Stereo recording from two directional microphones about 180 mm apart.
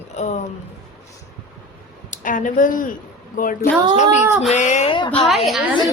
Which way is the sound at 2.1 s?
45° left (ahead or behind).